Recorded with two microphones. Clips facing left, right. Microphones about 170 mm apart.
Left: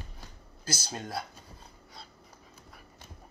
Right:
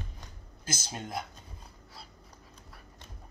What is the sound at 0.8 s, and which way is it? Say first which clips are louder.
Speech: left 1 dB; 20° right (ahead or behind).